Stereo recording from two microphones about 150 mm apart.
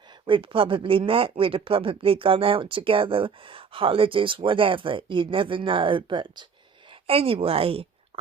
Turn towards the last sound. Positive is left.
turn(degrees=-40)  # may be behind; listen again after turning